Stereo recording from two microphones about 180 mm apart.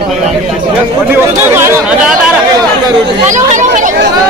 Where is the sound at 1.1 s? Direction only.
10° right (ahead or behind).